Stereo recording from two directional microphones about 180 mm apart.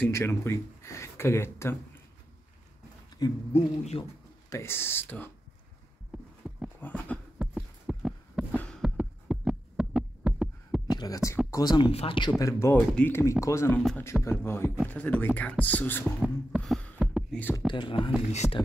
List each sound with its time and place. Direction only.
0.0 s speech: 15° left (ahead or behind)
3.2 s speech: 20° left (ahead or behind)
3.5 s speech: 35° left (ahead or behind)
4.5 s speech: 15° left (ahead or behind)
6.1 s a sound: 5° right (ahead or behind)
6.8 s a sound: 10° left (ahead or behind)
7.3 s heart sounds: 5° right (ahead or behind)
10.9 s a sound: 20° left (ahead or behind)
11.5 s speech: 25° left (ahead or behind)
12.4 s speech: 15° left (ahead or behind)
13.7 s speech: 5° left (ahead or behind)
16.2 s a sound: centre (ahead or behind)
17.6 s speech: 25° left (ahead or behind)
18.3 s speech: 40° left (ahead or behind)